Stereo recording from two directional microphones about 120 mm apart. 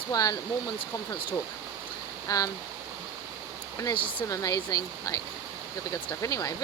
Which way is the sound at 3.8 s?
40° left (ahead or behind).